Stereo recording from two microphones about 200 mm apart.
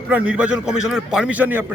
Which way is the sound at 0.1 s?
5° right (ahead or behind).